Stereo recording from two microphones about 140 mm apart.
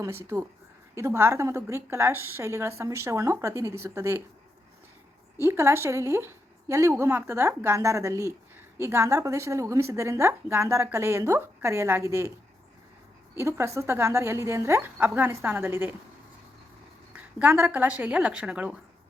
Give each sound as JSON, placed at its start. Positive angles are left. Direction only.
{"t": 0.0, "sound": "a woman's voice", "side_deg": -20}
{"t": 5.4, "sound": "a woman's voice", "side_deg": -20}
{"t": 13.3, "sound": "a woman's voice", "side_deg": -20}
{"t": 17.2, "sound": "a woman's voice", "side_deg": -10}